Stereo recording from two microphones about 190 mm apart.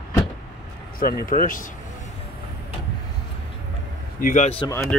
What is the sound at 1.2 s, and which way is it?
Speech, 45° left (ahead or behind).